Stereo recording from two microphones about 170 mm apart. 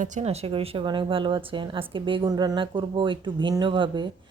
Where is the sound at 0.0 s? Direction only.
45° right (ahead or behind).